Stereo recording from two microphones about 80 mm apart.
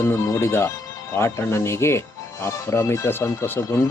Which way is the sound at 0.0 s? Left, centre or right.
Left.